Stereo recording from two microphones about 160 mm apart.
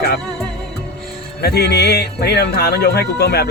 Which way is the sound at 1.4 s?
80° left.